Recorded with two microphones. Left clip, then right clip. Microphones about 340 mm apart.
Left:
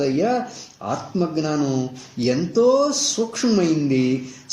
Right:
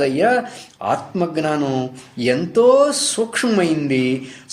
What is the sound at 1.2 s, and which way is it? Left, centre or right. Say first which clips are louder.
Speech: even; right.